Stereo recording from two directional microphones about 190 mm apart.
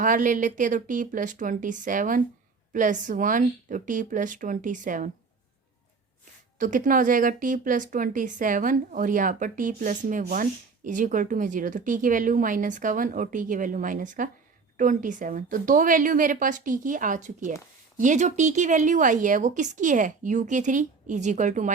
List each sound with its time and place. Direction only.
0.0 s a woman's voice: 45° right (ahead or behind)
6.6 s a woman's voice: 45° right (ahead or behind)